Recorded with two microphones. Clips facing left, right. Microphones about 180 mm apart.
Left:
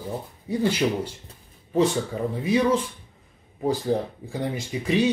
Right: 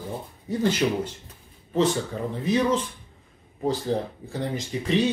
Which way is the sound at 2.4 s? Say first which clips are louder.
Left 1 dB; 10° left (ahead or behind).